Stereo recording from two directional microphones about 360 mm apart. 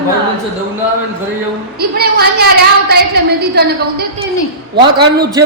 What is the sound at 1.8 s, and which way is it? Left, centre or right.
A woman's voice, right.